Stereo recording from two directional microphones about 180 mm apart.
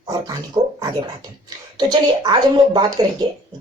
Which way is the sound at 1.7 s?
25° right (ahead or behind).